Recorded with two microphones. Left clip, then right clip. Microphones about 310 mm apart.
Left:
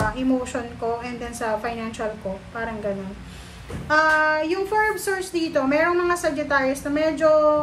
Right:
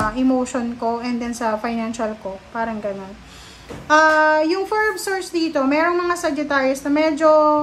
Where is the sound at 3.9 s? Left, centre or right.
Centre.